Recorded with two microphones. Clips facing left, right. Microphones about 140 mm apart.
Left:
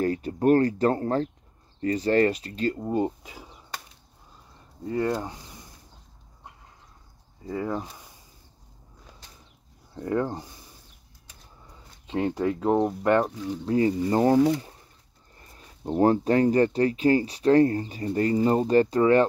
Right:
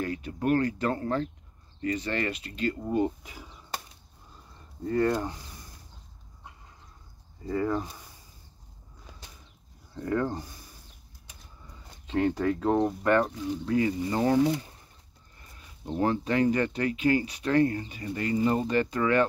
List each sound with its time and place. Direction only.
0.0 s speech: 40° left (ahead or behind)
2.8 s speech: 25° left (ahead or behind)
4.8 s speech: 10° left (ahead or behind)
7.4 s speech: 10° left (ahead or behind)
9.9 s speech: 20° left (ahead or behind)
12.1 s speech: 20° left (ahead or behind)